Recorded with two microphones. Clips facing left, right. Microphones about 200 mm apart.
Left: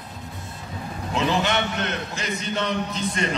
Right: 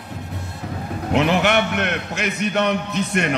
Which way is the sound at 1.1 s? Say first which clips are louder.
Right 5 dB; 65° right (ahead or behind).